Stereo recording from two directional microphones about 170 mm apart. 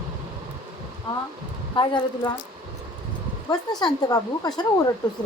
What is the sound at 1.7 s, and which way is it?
Speech, 30° left (ahead or behind).